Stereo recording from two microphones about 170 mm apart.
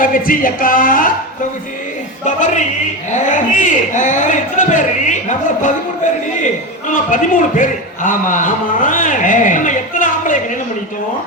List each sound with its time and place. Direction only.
0.0 s speech: 55° left (ahead or behind)
2.2 s speech: 45° left (ahead or behind)
6.4 s a man's voice: 50° left (ahead or behind)